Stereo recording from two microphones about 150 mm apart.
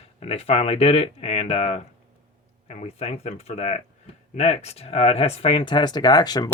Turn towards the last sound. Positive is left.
turn(degrees=25)  # may be behind; listen again after turning